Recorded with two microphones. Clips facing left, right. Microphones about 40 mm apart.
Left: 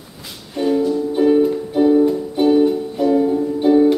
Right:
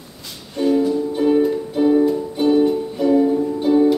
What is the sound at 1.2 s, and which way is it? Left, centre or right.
Music, centre.